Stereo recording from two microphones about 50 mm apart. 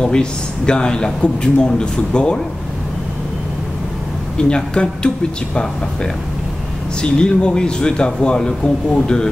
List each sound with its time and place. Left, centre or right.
0.0 s speech: centre
4.4 s speech: centre
7.0 s speech: centre